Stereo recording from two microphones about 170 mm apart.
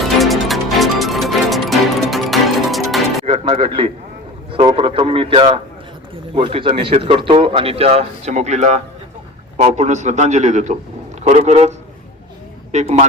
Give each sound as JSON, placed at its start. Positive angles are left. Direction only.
{"t": 0.2, "sound": "music", "side_deg": 0}
{"t": 3.2, "sound": "a man's voice", "side_deg": -35}
{"t": 12.7, "sound": "speech", "side_deg": -40}